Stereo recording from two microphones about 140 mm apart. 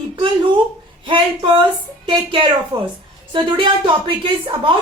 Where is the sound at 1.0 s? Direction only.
35° right (ahead or behind).